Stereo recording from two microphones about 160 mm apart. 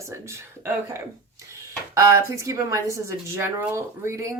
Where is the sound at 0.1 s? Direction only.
20° right (ahead or behind).